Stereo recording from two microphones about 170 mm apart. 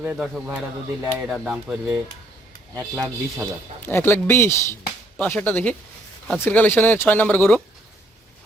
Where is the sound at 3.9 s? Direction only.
15° left (ahead or behind).